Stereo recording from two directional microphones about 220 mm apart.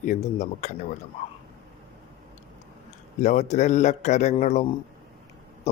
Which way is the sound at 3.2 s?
35° left (ahead or behind).